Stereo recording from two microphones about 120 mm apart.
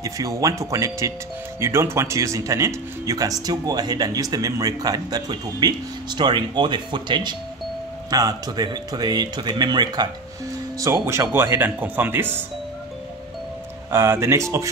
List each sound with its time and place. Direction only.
0.0 s speech: 30° right (ahead or behind)
10.8 s speech: 25° right (ahead or behind)
13.9 s speech: 20° right (ahead or behind)